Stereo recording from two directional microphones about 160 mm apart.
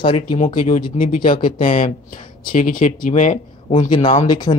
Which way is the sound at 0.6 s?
55° left (ahead or behind).